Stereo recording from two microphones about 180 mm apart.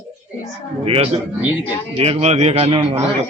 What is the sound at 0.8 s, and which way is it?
A man's voice, 35° right (ahead or behind).